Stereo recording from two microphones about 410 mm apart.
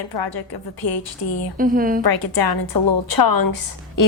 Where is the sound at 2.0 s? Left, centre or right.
Left.